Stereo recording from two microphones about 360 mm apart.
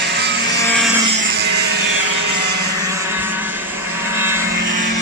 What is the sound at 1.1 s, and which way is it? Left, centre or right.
Music, right.